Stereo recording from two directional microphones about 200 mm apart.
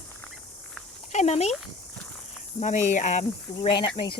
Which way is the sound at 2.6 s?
35° left (ahead or behind).